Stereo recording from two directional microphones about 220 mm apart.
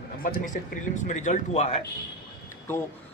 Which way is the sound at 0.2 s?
35° left (ahead or behind).